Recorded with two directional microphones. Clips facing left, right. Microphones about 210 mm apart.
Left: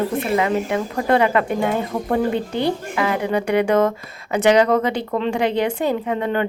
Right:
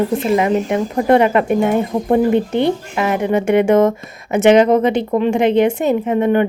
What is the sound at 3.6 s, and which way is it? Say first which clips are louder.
A woman's voice: right 4 dB; 20° right (ahead or behind).